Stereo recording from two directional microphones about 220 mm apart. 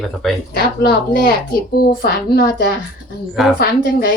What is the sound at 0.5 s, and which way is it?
A woman's voice, 45° left (ahead or behind).